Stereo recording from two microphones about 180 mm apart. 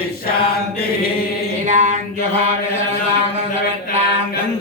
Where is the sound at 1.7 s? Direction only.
40° right (ahead or behind).